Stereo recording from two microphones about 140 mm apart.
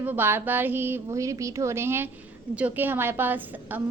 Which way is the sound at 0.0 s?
15° right (ahead or behind).